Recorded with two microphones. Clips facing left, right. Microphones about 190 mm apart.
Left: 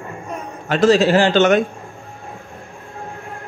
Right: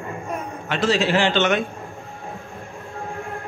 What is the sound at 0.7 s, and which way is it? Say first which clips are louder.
Speech: left 7 dB; 40° left (ahead or behind).